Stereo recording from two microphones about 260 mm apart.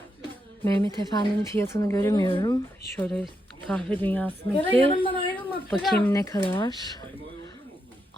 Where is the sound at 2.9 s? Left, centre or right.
Centre.